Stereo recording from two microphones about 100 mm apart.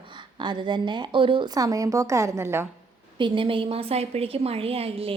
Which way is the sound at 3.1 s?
55° right (ahead or behind).